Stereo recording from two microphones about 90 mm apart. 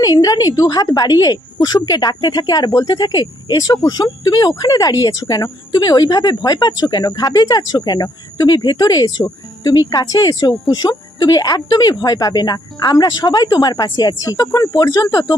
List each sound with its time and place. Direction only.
0.0 s speech: 45° left (ahead or behind)